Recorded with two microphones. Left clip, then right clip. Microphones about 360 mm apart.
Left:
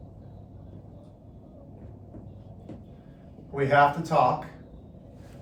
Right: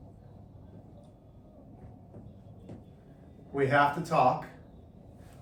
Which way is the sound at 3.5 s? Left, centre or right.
Centre.